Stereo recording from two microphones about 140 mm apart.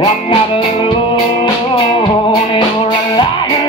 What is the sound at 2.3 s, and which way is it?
Music, 30° left (ahead or behind).